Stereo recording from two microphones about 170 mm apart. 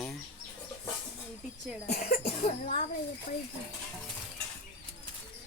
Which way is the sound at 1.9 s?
65° left (ahead or behind).